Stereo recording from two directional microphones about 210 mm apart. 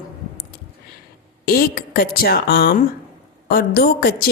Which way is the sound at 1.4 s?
45° left (ahead or behind).